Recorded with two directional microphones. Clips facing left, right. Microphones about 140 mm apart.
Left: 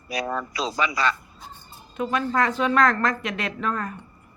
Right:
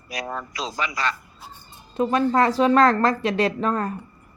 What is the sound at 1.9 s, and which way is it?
A woman's voice, 35° right (ahead or behind).